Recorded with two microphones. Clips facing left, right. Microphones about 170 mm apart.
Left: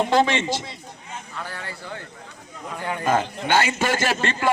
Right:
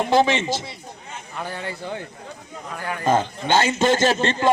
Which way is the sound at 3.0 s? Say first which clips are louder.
Right 2 dB; 25° right (ahead or behind).